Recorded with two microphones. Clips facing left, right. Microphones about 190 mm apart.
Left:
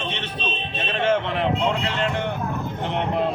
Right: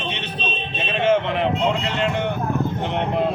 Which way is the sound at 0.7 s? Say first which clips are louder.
Right 3 dB; 5° right (ahead or behind).